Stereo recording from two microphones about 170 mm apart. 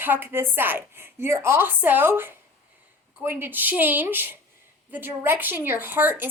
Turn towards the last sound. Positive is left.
turn(degrees=-10)  # may be behind; listen again after turning